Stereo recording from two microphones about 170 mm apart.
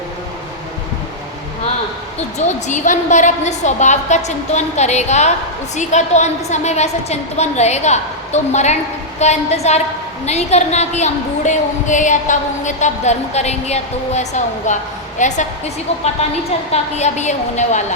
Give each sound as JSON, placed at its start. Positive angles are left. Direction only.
{"t": 2.1, "sound": "a woman's voice", "side_deg": 40}
{"t": 16.7, "sound": "a woman's voice", "side_deg": 40}